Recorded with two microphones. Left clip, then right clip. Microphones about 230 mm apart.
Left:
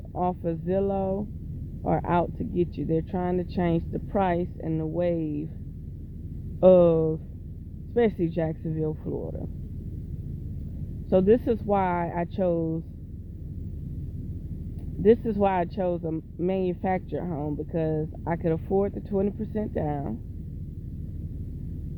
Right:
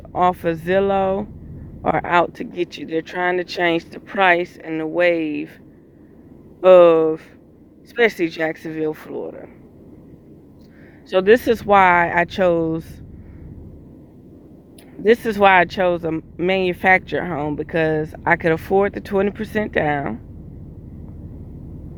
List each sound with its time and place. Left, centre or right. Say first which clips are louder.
0.2 s speech: right 11 dB; right
6.6 s speech: right 8 dB; right
11.1 s speech: right 7 dB; right
12.5 s speech: right 8 dB; right
15.0 s speech: right 7 dB; right